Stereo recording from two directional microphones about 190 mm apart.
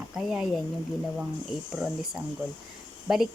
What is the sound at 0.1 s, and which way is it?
Speech, centre (ahead or behind).